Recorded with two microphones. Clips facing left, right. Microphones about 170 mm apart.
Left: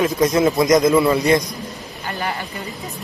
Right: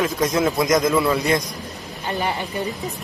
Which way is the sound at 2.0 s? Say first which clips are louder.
Right 2 dB; 20° right (ahead or behind).